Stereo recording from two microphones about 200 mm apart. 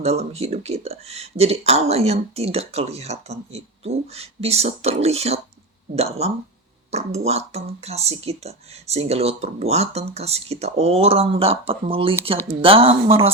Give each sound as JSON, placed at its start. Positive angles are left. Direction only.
{"t": 0.0, "sound": "speech", "side_deg": -30}